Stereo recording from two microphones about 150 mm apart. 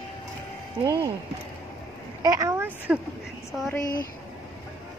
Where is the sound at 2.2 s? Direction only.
20° right (ahead or behind).